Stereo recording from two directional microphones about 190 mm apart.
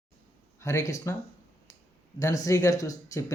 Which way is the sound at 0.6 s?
15° left (ahead or behind).